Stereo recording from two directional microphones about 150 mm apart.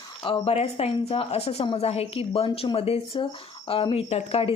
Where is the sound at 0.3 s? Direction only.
40° left (ahead or behind).